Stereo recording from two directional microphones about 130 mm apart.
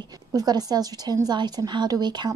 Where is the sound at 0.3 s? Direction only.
30° right (ahead or behind).